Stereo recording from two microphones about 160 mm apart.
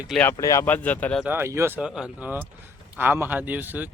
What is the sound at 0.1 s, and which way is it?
Speech, 10° left (ahead or behind).